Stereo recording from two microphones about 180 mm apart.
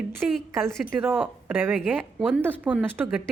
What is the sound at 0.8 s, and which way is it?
Speech, 10° right (ahead or behind).